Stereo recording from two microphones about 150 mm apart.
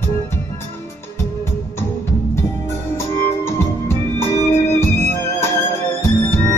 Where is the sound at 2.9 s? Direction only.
15° left (ahead or behind).